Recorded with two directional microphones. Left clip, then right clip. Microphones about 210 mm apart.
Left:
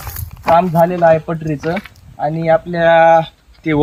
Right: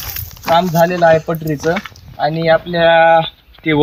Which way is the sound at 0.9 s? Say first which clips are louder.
Right 1 dB; 10° right (ahead or behind).